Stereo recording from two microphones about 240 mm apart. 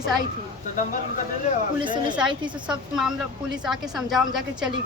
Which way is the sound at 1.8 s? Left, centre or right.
Centre.